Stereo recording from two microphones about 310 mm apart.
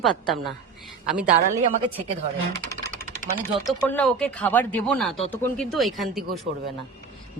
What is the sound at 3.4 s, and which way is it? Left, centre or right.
A woman's voice, centre.